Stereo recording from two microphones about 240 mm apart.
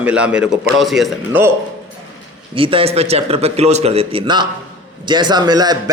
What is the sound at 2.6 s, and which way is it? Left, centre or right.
Speech, right.